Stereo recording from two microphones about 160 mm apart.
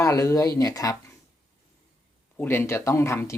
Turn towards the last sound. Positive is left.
turn(degrees=15)  # may be behind; listen again after turning